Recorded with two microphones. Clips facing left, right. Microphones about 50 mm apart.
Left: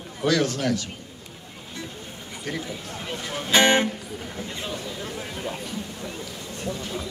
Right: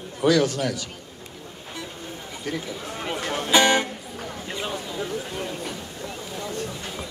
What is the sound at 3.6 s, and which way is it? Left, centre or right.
Music, left.